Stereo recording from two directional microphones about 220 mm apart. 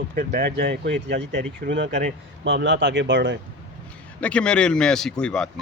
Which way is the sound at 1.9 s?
30° right (ahead or behind).